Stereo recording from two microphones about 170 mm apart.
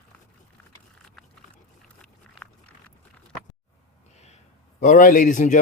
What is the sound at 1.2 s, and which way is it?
Pig, centre (ahead or behind).